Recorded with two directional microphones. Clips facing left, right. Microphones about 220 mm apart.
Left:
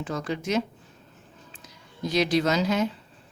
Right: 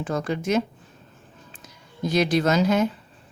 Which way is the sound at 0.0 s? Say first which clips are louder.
Right 4 dB; 50° right (ahead or behind).